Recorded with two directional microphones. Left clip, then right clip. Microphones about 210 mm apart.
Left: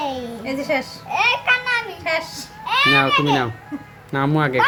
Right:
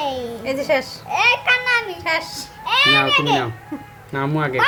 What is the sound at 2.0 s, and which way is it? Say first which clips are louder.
Speech: right 1 dB; 45° right (ahead or behind).